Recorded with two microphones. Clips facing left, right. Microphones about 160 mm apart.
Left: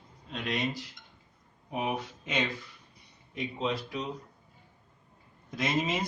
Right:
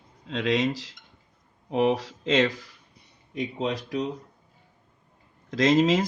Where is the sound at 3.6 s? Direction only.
65° right (ahead or behind).